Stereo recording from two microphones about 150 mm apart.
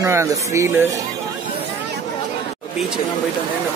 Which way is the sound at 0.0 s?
20° right (ahead or behind).